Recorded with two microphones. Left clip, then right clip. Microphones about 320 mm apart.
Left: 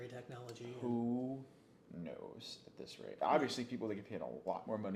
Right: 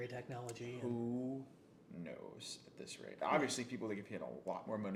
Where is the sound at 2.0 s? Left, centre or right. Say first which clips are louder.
Left 1 dB; left.